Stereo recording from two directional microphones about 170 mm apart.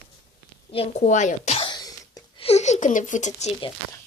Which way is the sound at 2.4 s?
40° left (ahead or behind).